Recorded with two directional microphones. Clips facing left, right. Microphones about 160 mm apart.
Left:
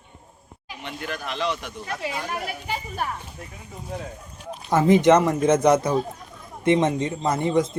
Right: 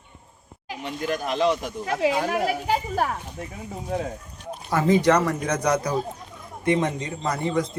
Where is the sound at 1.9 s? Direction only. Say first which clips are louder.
Right 8 dB; 80° right.